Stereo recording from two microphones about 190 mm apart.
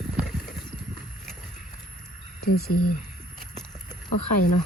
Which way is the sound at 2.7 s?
45° left (ahead or behind).